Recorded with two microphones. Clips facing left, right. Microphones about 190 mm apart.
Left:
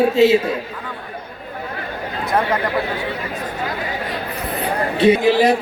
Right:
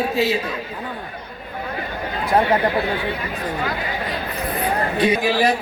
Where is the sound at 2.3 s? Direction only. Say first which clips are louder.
Right 2 dB; 30° right (ahead or behind).